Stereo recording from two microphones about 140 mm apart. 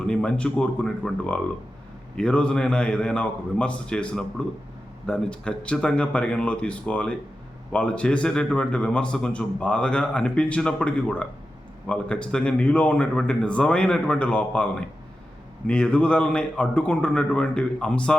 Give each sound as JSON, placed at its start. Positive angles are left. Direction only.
{"t": 0.0, "sound": "a man's voice", "side_deg": 5}